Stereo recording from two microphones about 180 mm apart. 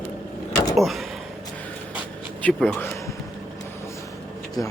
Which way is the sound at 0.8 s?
Centre (ahead or behind).